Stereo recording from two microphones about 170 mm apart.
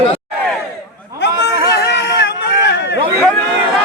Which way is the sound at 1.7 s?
85° left.